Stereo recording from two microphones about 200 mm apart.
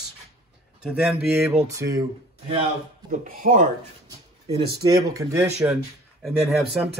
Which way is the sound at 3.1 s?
45° right (ahead or behind).